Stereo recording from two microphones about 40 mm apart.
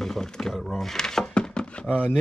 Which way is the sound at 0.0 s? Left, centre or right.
Centre.